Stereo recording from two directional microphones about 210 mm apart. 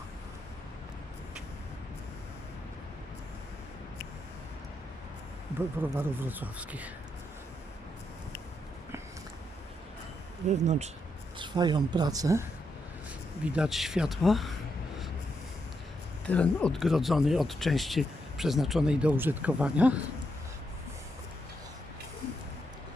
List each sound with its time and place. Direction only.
5.8 s speech: 10° right (ahead or behind)
10.5 s speech: 35° right (ahead or behind)
11.3 s speech: 20° right (ahead or behind); by 14.5 s centre (ahead or behind)
16.2 s speech: 5° left (ahead or behind)